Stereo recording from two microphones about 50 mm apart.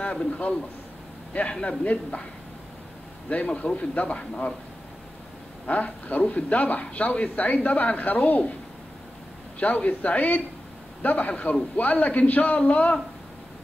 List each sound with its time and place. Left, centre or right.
0.0 s a man's voice: left
3.3 s a man's voice: left
5.7 s speech: left
9.6 s a man's voice: left